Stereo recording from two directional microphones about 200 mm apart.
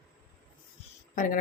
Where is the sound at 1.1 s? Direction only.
40° left (ahead or behind).